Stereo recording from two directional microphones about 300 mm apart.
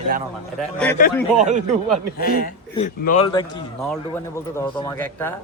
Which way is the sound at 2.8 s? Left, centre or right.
Left.